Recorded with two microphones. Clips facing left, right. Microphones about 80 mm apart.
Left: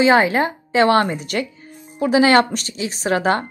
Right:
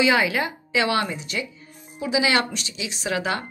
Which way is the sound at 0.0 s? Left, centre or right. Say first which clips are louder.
Left 6 dB; left.